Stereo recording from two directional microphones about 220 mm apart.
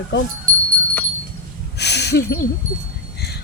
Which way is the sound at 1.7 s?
50° left (ahead or behind).